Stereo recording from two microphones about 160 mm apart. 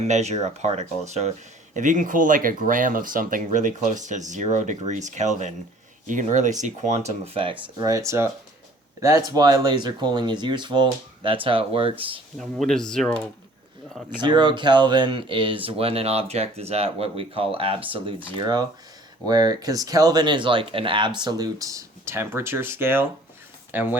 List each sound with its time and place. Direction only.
0.1 s speech: 45° right (ahead or behind)
7.8 s speech: 20° right (ahead or behind)
12.4 s speech: centre (ahead or behind)
14.2 s speech: 30° right (ahead or behind); by 23.9 s 10° right (ahead or behind)